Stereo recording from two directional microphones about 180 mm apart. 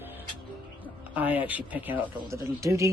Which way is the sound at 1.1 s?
10° right (ahead or behind).